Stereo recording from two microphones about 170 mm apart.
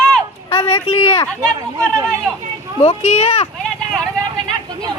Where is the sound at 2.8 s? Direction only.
35° left (ahead or behind).